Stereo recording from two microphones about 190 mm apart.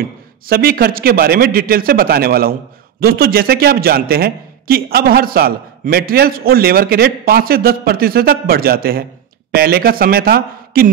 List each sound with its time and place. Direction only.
0.5 s a man's voice: 50° right (ahead or behind)